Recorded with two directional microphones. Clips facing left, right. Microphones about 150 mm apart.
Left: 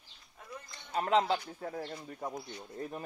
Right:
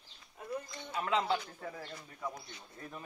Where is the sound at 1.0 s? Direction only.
55° left (ahead or behind).